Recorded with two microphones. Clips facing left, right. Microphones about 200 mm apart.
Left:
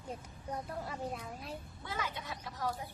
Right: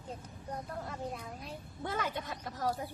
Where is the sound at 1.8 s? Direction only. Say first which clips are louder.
Right 6 dB; 50° right (ahead or behind).